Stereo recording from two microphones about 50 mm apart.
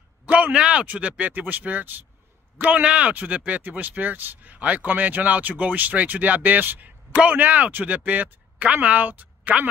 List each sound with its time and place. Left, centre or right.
0.3 s speech: right
2.6 s speech: right